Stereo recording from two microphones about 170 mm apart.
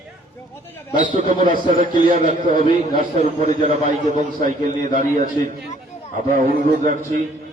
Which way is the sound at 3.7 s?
45° right (ahead or behind).